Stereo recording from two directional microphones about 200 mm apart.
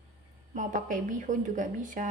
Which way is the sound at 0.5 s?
40° right (ahead or behind).